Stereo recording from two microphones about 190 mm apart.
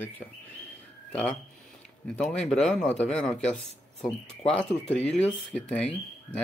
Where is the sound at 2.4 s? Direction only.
5° left (ahead or behind).